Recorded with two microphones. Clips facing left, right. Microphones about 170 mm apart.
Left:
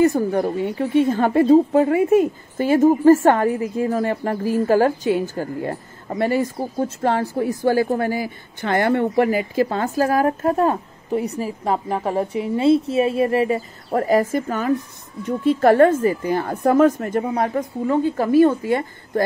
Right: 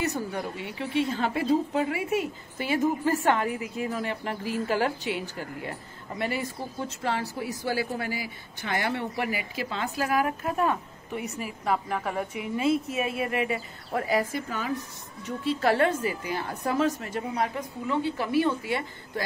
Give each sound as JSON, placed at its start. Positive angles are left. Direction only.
{"t": 0.0, "sound": "a woman's voice", "side_deg": 50}